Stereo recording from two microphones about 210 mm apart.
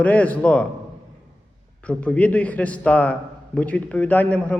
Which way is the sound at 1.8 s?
5° left (ahead or behind).